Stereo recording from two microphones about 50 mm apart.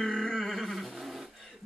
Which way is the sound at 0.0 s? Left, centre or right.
Centre.